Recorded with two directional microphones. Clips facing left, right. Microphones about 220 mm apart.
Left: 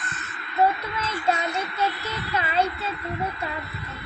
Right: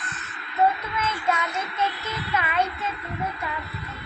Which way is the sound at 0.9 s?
35° left (ahead or behind).